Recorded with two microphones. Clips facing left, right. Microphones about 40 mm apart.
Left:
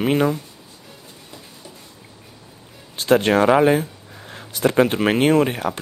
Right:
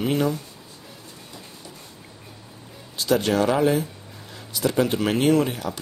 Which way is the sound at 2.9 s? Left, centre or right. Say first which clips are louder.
Left 5 dB; left.